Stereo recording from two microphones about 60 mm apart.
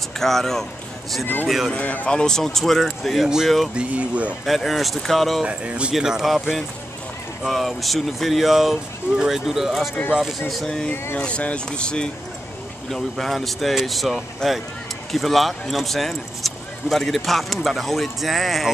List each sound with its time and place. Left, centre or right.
0.2 s speech: centre
1.2 s speech: left; by 3.7 s centre
3.7 s speech: right
4.5 s speech: centre
5.4 s speech: centre
10.6 s speech: centre
12.9 s speech: centre